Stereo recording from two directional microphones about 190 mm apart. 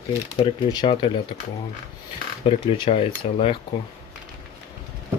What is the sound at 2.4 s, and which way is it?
Speech, 30° left (ahead or behind).